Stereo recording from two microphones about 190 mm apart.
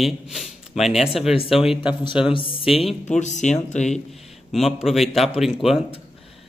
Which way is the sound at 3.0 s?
40° left (ahead or behind).